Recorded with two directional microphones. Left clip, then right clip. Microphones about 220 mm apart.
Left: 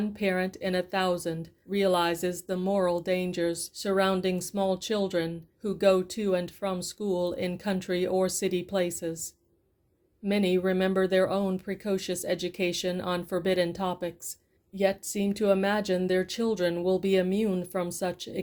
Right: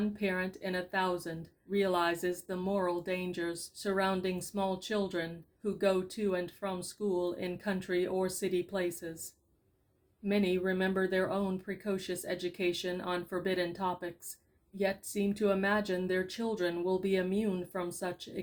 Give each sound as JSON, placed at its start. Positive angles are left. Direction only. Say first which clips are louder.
{"t": 0.2, "sound": "speech", "louder": "left 9 dB", "side_deg": 45}
{"t": 10.2, "sound": "speech", "louder": "left 5 dB", "side_deg": 45}